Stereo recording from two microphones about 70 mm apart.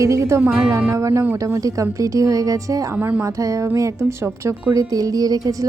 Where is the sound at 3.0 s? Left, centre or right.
Right.